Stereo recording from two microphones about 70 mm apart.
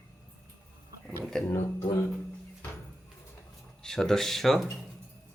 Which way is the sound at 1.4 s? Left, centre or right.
Left.